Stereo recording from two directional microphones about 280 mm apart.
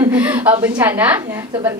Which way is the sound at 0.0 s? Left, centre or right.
Centre.